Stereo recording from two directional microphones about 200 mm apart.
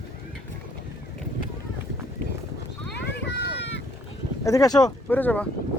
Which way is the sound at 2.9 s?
60° left (ahead or behind).